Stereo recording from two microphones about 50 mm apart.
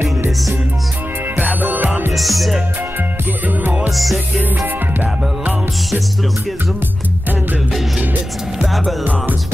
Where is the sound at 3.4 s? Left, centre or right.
Right.